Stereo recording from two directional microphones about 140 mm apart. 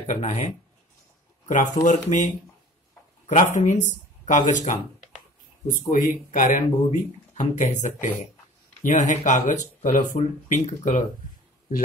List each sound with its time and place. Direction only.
0.0 s speech: 55° left (ahead or behind)
1.5 s speech: 60° left (ahead or behind)
3.3 s speech: 65° left (ahead or behind)
5.9 s speech: 70° left (ahead or behind)